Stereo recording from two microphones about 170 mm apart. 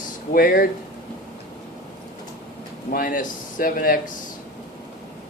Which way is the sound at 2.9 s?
55° left (ahead or behind).